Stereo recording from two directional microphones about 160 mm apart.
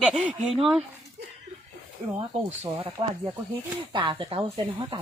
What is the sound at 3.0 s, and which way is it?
Speech, 30° right (ahead or behind).